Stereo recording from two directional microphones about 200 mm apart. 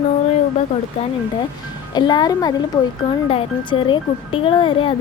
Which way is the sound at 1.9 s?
20° left (ahead or behind).